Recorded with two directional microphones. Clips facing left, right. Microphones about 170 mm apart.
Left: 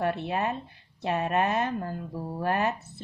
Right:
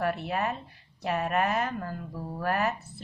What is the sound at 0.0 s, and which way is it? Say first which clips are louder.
A woman's voice: left 1 dB; 25° left (ahead or behind).